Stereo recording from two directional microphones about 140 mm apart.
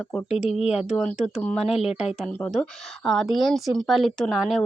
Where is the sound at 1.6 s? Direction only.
45° left (ahead or behind).